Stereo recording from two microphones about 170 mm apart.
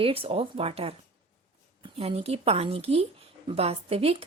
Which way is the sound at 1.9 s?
35° right (ahead or behind).